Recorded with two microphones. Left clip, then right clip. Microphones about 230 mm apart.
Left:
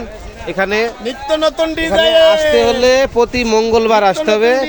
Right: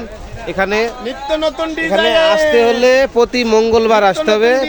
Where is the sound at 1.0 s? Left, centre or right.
Left.